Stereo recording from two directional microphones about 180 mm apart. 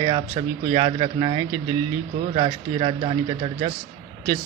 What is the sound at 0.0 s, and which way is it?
Speech, 25° right (ahead or behind).